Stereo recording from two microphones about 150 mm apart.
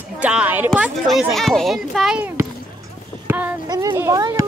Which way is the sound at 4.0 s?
25° right (ahead or behind).